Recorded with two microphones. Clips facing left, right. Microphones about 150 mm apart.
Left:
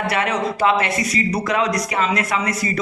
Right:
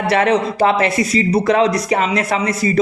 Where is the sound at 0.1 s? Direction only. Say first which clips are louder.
Right 10 dB; 35° right (ahead or behind).